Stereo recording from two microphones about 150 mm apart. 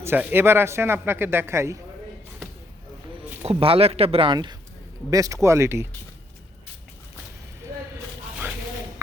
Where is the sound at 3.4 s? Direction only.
40° right (ahead or behind); by 5.8 s 20° right (ahead or behind).